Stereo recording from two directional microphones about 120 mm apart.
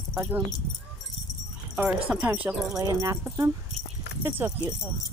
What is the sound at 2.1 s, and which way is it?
Speech, 10° right (ahead or behind).